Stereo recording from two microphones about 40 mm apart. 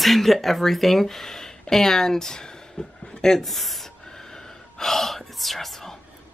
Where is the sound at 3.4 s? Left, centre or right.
Centre.